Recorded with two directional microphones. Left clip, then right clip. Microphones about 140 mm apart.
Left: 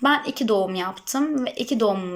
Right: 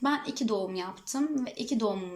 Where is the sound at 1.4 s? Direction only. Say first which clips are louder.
Left 8 dB; 60° left (ahead or behind).